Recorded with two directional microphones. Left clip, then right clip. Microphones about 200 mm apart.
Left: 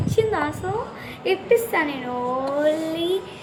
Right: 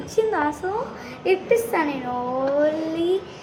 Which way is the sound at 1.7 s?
15° right (ahead or behind).